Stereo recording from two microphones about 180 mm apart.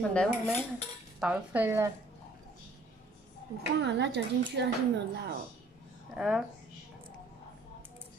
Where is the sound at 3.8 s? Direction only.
70° right (ahead or behind).